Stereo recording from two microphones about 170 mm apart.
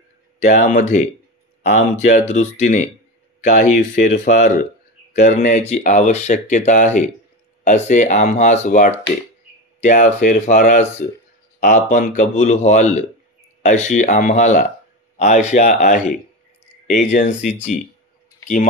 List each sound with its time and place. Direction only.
0.4 s a man's voice: 50° left (ahead or behind)